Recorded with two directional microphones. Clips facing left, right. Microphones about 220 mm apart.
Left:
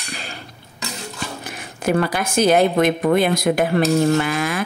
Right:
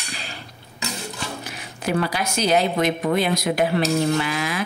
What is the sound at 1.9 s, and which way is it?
Speech, 50° left (ahead or behind).